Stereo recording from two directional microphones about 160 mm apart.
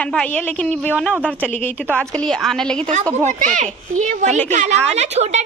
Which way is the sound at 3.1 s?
45° right (ahead or behind).